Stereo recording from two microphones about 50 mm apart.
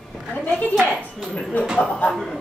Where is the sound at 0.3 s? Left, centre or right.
Left.